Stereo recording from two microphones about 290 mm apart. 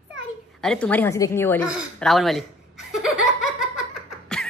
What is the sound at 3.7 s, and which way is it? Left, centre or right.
Laughter, left.